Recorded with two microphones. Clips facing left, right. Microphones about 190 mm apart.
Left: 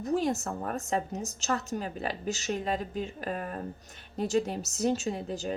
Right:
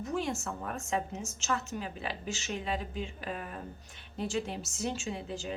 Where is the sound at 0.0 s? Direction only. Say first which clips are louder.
Left 5 dB; 35° left (ahead or behind).